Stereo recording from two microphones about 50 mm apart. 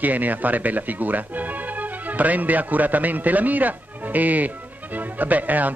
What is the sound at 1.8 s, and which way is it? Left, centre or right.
A man's voice, right.